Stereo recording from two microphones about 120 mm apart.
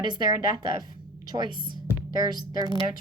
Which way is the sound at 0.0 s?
35° right (ahead or behind).